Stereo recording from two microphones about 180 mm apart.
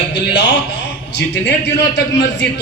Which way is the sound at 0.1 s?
75° left (ahead or behind).